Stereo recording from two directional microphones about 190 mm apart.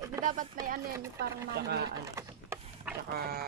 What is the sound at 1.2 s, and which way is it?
Speech, 60° right (ahead or behind).